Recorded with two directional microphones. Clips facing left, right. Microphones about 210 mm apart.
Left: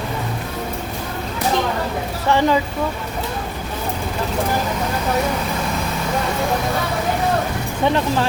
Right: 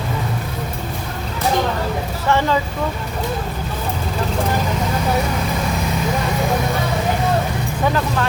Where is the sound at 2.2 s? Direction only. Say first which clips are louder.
Left 1 dB; 15° left (ahead or behind).